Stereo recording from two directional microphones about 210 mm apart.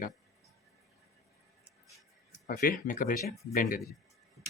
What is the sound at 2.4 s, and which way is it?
Speech, 40° left (ahead or behind).